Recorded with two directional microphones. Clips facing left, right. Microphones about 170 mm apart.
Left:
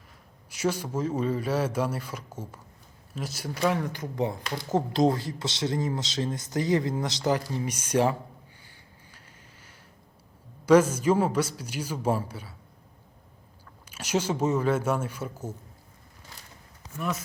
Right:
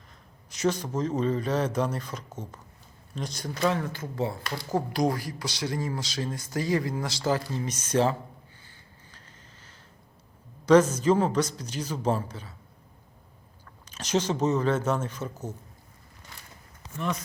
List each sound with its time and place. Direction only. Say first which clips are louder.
0.5 s speech: right 1 dB; 10° left (ahead or behind)
8.6 s a sound: even; 10° left (ahead or behind)
10.7 s speech: even; 10° left (ahead or behind)
13.8 s speech: right 1 dB; 10° left (ahead or behind)
17.0 s speech: even; 5° left (ahead or behind)